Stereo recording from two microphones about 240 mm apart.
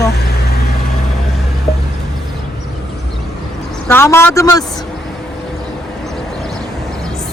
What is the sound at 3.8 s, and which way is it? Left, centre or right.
Speech, centre.